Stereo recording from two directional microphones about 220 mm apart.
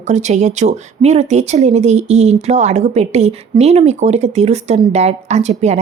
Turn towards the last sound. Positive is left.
turn(degrees=-30)  # may be behind; listen again after turning